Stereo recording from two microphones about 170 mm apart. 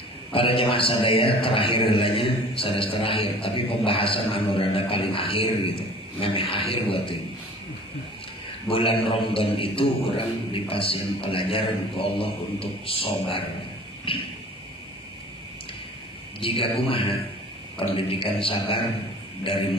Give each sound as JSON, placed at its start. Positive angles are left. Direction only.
{"t": 0.3, "sound": "a man's voice", "side_deg": 30}
{"t": 8.6, "sound": "a man's voice", "side_deg": 30}
{"t": 16.3, "sound": "a man's voice", "side_deg": 30}